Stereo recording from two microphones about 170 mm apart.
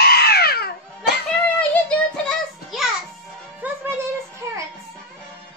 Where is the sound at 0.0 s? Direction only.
70° left (ahead or behind).